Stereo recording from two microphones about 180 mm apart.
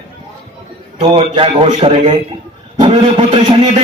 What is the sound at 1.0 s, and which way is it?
A man's voice, 30° right (ahead or behind).